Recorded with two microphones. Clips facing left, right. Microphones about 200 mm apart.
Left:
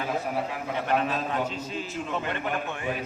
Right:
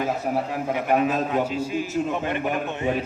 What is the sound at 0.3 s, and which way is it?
Speech, 45° right (ahead or behind).